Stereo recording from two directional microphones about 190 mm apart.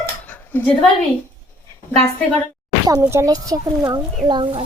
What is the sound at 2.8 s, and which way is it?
Speech, 15° right (ahead or behind).